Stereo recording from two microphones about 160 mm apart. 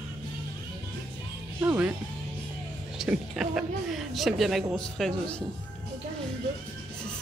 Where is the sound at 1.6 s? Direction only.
15° right (ahead or behind).